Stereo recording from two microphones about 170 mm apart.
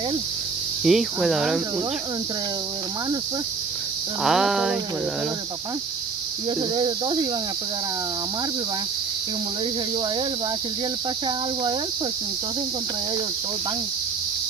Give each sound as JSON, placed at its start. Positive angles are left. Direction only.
{"t": 0.8, "sound": "cricket", "side_deg": 0}
{"t": 4.2, "sound": "cricket", "side_deg": 0}
{"t": 6.7, "sound": "speech", "side_deg": -30}